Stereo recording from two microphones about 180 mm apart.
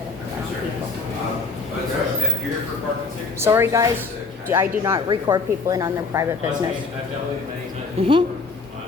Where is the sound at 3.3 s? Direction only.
15° right (ahead or behind).